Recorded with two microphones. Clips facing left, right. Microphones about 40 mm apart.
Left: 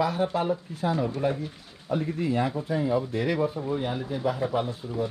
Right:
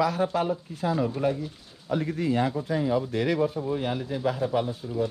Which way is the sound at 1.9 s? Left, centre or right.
Right.